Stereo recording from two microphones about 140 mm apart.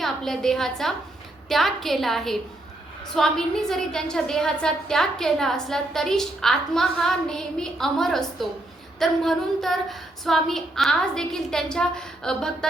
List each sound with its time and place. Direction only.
0.0 s a woman's voice: 5° left (ahead or behind)